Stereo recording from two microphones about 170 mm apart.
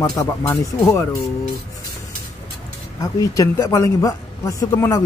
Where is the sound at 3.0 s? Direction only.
20° left (ahead or behind).